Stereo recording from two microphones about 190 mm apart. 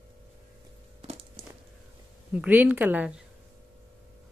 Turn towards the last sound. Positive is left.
turn(degrees=-10)  # may be behind; listen again after turning